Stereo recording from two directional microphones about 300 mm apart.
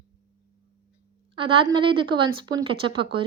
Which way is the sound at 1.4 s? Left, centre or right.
Centre.